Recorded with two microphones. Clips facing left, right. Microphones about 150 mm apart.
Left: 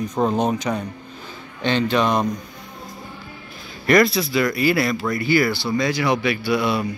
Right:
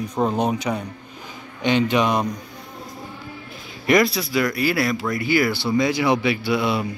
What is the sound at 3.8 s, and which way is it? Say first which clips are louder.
Speech: left 2 dB; 10° right (ahead or behind).